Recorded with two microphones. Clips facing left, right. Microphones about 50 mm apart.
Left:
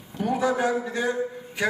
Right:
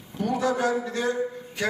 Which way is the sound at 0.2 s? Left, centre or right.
Centre.